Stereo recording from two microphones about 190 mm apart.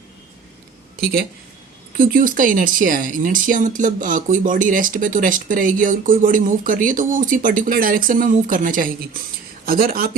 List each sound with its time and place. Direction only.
2.0 s speech: 45° right (ahead or behind)